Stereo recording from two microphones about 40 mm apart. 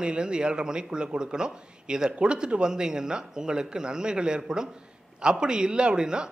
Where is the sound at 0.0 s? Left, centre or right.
Right.